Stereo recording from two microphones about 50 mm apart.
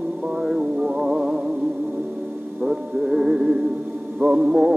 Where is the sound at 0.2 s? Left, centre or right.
Centre.